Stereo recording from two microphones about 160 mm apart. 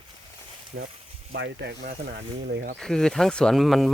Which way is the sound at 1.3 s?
90° right.